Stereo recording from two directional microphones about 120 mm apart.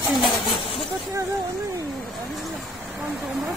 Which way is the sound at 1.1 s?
25° right (ahead or behind).